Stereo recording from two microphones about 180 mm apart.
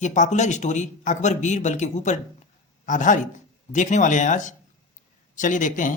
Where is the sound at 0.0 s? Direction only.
40° left (ahead or behind).